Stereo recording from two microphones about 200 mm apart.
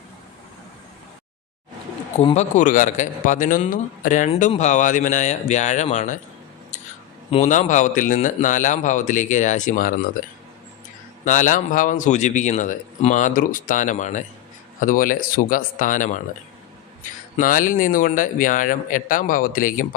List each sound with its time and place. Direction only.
2.1 s a man's voice: 35° left (ahead or behind)
7.3 s a man's voice: 35° left (ahead or behind)
11.3 s a man's voice: 40° left (ahead or behind)
17.3 s a man's voice: 40° left (ahead or behind)